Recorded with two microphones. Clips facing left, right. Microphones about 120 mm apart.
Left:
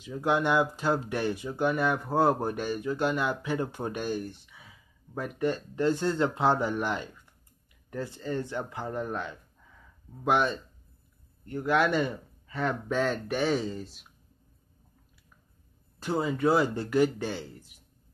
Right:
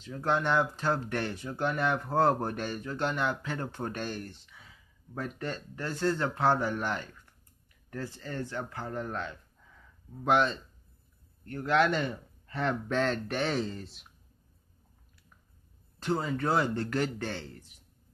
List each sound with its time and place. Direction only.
0.0 s speech: 10° left (ahead or behind)
16.0 s speech: 5° left (ahead or behind)